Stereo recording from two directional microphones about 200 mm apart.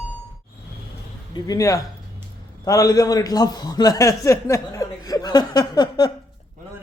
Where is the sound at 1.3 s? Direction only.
20° left (ahead or behind).